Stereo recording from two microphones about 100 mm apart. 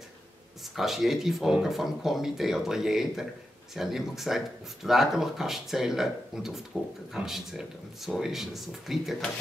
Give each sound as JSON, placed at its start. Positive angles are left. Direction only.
{"t": 0.7, "sound": "speech", "side_deg": 0}